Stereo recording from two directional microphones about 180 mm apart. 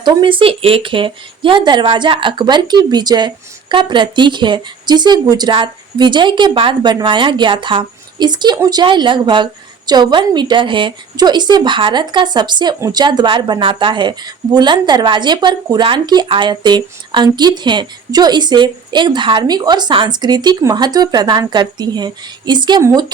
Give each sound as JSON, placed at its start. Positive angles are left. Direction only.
{"t": 0.0, "sound": "a woman's voice", "side_deg": -25}